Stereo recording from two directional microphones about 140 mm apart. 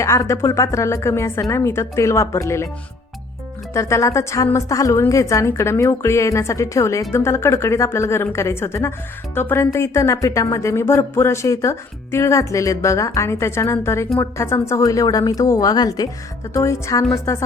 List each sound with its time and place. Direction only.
0.0 s speech: 20° left (ahead or behind)
3.8 s speech: 20° left (ahead or behind)